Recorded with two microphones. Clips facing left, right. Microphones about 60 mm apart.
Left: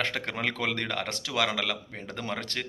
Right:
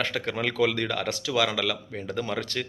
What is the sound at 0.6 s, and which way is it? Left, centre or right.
A man's voice, left.